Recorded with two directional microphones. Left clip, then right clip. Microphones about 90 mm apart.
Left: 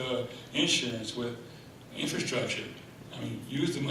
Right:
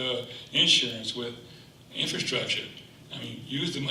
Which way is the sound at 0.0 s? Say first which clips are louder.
Right 2 dB; 35° right (ahead or behind).